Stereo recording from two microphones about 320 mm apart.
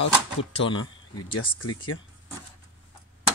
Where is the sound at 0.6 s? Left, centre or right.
Centre.